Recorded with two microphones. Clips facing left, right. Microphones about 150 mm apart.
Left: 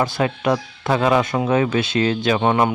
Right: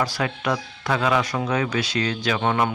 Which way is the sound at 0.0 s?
25° left (ahead or behind).